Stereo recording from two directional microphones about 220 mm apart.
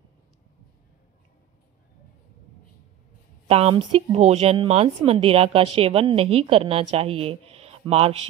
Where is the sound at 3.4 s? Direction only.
25° right (ahead or behind).